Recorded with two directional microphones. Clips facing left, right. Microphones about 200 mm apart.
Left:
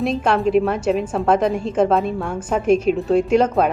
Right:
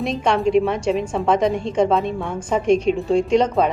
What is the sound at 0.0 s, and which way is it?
A woman's voice, 5° left (ahead or behind).